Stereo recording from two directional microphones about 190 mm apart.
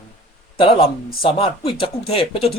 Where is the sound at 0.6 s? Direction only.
30° left (ahead or behind).